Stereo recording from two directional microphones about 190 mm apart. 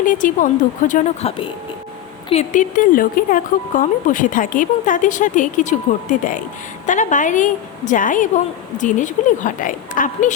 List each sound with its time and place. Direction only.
0.0 s speech: 45° left (ahead or behind)
2.3 s speech: 40° left (ahead or behind)